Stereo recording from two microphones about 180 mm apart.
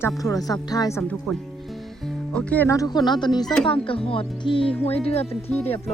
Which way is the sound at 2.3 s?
5° left (ahead or behind).